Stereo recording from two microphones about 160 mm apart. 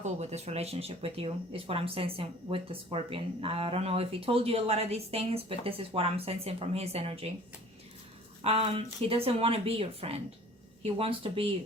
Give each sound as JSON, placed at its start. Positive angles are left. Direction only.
{"t": 0.0, "sound": "speech", "side_deg": -45}
{"t": 8.4, "sound": "speech", "side_deg": -35}